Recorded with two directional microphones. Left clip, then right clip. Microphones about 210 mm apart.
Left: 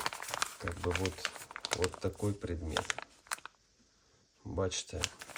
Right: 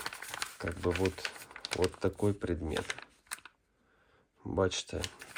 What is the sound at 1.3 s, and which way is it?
Typing, 20° left (ahead or behind).